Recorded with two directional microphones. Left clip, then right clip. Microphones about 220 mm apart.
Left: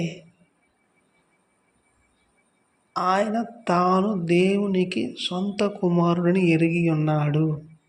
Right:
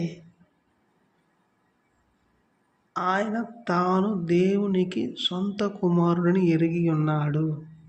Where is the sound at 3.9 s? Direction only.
Centre (ahead or behind).